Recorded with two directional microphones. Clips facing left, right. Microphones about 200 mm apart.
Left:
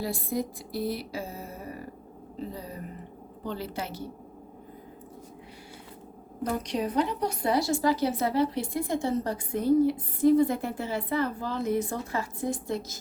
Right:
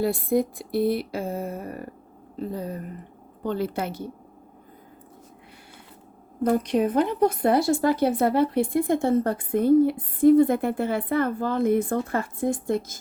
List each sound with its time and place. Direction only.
0.0 s a woman's voice: 60° right (ahead or behind)
6.4 s a woman's voice: 55° right (ahead or behind)